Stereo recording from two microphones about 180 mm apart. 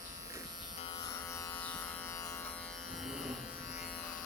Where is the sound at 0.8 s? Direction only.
25° left (ahead or behind); by 3.3 s centre (ahead or behind).